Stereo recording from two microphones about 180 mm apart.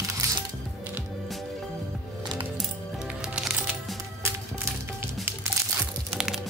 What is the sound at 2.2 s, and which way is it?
Music, 25° right (ahead or behind).